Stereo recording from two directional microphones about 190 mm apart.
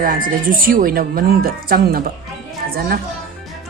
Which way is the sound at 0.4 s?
50° right (ahead or behind).